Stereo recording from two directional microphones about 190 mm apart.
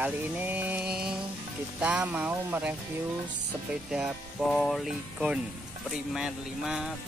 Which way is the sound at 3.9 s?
5° right (ahead or behind).